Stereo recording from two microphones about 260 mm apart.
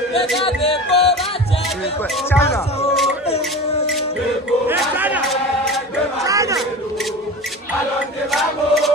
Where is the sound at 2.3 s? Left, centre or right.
Centre.